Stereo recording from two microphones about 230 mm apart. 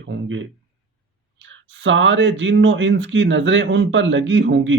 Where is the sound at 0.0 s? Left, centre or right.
Right.